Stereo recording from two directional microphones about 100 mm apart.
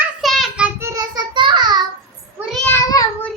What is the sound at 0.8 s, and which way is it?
Child singing, 40° right (ahead or behind).